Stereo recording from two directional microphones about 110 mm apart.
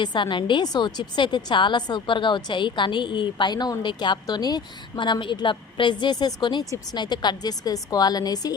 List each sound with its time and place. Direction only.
0.0 s a woman's voice: 45° left (ahead or behind)